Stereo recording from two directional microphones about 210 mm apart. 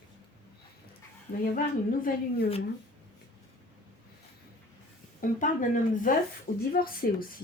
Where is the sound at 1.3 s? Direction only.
40° left (ahead or behind).